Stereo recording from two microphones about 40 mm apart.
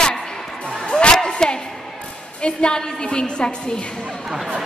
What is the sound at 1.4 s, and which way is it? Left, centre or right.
A woman's voice, centre.